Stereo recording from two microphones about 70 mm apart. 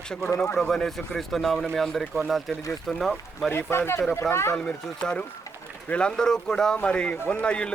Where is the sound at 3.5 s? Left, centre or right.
Left.